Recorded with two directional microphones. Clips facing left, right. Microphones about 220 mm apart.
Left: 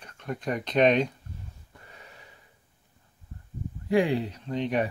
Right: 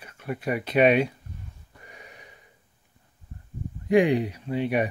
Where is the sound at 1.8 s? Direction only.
15° right (ahead or behind).